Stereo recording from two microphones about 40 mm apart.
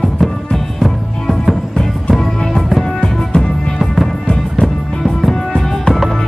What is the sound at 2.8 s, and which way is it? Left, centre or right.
Music, centre.